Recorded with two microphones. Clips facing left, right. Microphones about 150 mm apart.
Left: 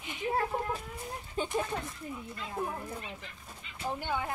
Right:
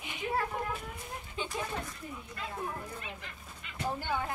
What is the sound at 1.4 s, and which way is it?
Speech, 45° left (ahead or behind).